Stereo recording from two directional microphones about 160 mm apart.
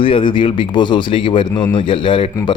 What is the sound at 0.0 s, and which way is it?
Speech, 30° left (ahead or behind).